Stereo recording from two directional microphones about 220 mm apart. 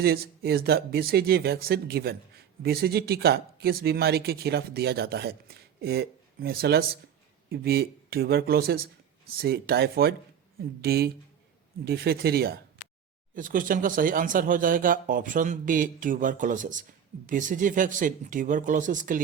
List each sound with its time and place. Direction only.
0.0 s speech: 45° right (ahead or behind)